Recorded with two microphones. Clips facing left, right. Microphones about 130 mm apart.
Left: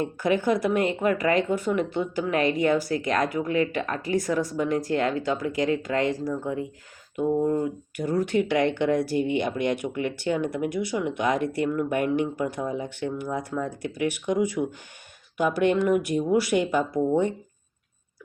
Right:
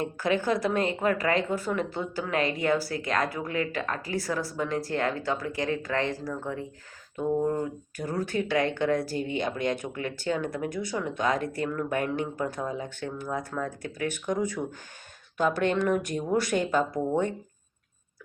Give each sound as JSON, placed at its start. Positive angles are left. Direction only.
{"t": 0.0, "sound": "speech", "side_deg": 15}